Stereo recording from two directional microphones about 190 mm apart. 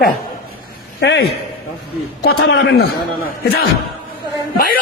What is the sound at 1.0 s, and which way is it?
Speech, 65° left (ahead or behind).